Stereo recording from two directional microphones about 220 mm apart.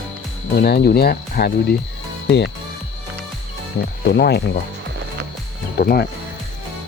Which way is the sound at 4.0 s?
45° left (ahead or behind).